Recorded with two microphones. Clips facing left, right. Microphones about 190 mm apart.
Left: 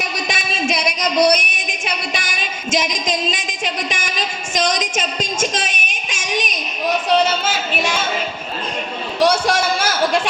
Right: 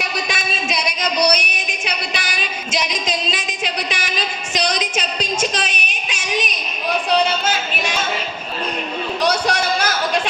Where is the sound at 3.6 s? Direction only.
50° left (ahead or behind).